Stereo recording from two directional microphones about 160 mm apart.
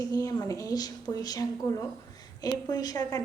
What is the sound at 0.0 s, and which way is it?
A woman's voice, 25° left (ahead or behind).